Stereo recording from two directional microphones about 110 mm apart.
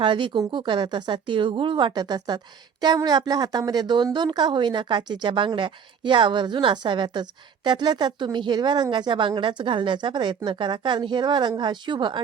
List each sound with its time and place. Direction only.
0.0 s speech: 50° right (ahead or behind)